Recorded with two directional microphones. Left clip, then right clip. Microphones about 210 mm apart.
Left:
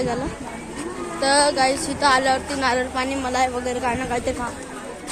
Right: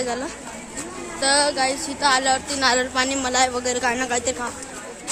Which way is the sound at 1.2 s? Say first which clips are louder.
Left 2 dB; 5° right (ahead or behind).